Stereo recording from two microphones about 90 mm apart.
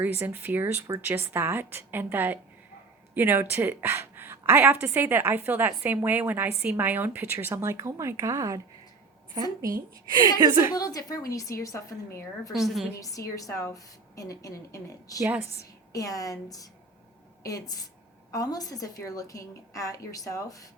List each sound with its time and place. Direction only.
0.0 s a woman's voice: 20° right (ahead or behind); by 8.6 s 40° right (ahead or behind)
10.1 s a woman's voice: 50° right (ahead or behind)
10.7 s a woman's voice: 45° left (ahead or behind)
12.5 s a woman's voice: centre (ahead or behind)
13.0 s a woman's voice: 40° left (ahead or behind)